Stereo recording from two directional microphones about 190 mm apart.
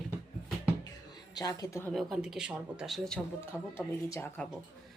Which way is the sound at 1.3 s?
20° left (ahead or behind).